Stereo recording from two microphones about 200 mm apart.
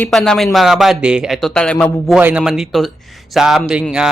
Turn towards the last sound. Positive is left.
turn(degrees=-5)  # may be behind; listen again after turning